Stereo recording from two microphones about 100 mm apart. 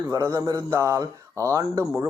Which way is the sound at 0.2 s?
30° right (ahead or behind).